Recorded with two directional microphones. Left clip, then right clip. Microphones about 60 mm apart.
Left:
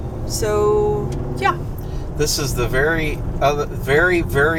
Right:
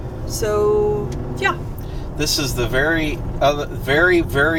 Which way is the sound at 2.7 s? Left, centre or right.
Right.